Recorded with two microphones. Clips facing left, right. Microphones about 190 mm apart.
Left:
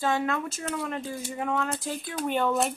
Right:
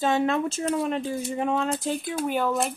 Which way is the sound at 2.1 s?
5° right (ahead or behind).